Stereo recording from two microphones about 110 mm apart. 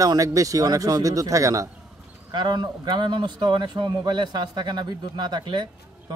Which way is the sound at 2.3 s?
45° right (ahead or behind).